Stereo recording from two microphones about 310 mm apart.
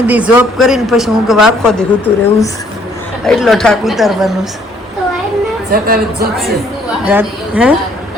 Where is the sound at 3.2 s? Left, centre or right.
Centre.